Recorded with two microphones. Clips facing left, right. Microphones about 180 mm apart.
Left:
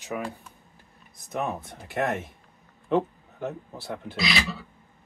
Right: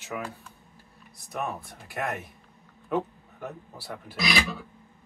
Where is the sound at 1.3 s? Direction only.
20° left (ahead or behind).